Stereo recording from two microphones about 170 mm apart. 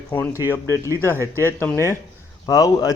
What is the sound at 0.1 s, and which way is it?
A man's voice, 15° left (ahead or behind).